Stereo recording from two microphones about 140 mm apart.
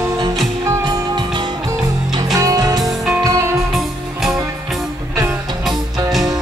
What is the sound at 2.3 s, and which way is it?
Music, 25° right (ahead or behind).